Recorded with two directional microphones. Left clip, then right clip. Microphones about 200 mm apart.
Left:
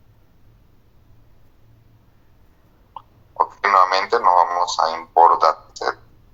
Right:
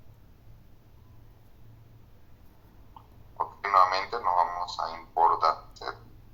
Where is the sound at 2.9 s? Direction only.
45° left (ahead or behind).